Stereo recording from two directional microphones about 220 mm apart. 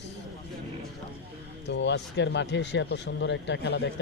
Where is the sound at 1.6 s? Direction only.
55° left (ahead or behind).